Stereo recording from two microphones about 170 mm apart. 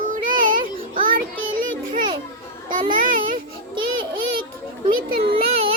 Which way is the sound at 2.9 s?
50° right (ahead or behind).